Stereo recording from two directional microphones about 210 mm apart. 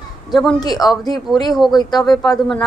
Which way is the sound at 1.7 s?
20° left (ahead or behind).